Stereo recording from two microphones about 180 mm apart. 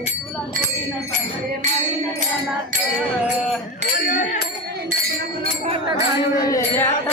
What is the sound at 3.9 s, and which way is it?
Music, 50° left (ahead or behind).